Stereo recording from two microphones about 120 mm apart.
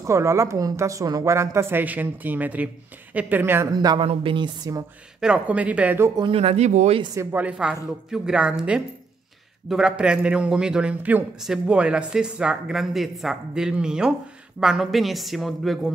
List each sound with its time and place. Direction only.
0.0 s a woman's voice: 25° right (ahead or behind)
3.7 s speech: 35° right (ahead or behind)
4.0 s speech: 50° right (ahead or behind)
5.2 s a man's voice: 10° right (ahead or behind)
6.3 s speech: 60° right (ahead or behind)
7.2 s a man's voice: 15° right (ahead or behind); by 15.9 s centre (ahead or behind)